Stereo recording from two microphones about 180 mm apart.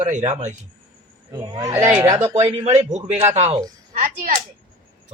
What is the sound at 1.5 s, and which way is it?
Speech, 20° right (ahead or behind).